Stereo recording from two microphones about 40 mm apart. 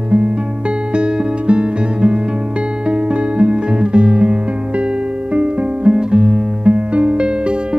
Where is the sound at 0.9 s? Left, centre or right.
Right.